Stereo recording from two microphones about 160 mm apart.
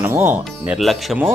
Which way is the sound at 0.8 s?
Centre (ahead or behind).